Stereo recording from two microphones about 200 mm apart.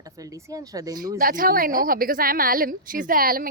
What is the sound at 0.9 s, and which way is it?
A woman's voice, 45° right (ahead or behind).